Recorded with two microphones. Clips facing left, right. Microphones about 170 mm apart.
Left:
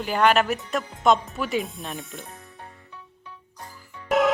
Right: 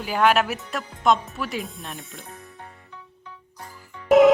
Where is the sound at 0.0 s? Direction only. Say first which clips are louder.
Even; 5° right (ahead or behind).